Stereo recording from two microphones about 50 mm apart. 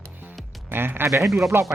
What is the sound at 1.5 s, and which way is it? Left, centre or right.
Speech, right.